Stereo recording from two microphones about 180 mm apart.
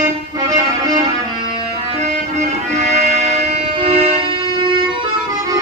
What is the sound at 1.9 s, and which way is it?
Music, 40° right (ahead or behind).